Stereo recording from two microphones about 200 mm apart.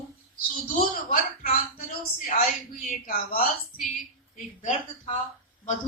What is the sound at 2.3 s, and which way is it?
A woman's voice, 40° left (ahead or behind).